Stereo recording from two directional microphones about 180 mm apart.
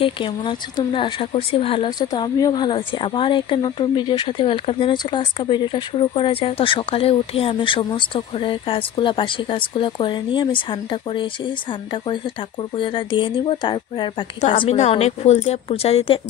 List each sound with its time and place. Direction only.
0.0 s speech: 25° left (ahead or behind)
12.7 s a woman's voice: 25° left (ahead or behind)